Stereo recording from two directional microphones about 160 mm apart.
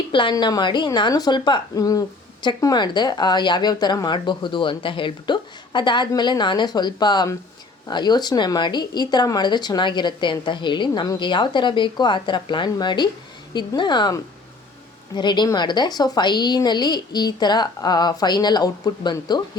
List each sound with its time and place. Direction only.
0.1 s a woman's voice: 30° left (ahead or behind)